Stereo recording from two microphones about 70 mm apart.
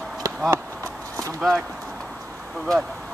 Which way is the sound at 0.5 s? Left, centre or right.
Right.